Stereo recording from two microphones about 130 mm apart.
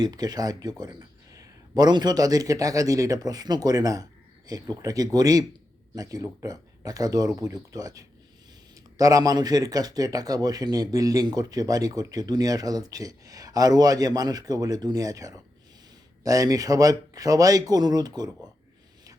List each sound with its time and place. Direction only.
0.0 s a man's voice: 30° right (ahead or behind)